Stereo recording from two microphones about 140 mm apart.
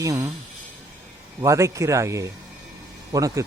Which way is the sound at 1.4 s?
20° right (ahead or behind).